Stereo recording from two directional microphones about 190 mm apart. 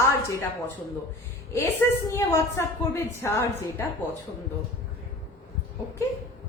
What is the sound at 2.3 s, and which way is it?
A woman's voice, 15° left (ahead or behind).